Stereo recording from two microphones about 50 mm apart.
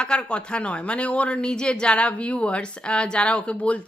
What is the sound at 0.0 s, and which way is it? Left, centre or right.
Speech, centre.